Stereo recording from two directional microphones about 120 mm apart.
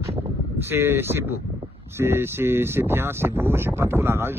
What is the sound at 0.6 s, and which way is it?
Speech, 20° right (ahead or behind).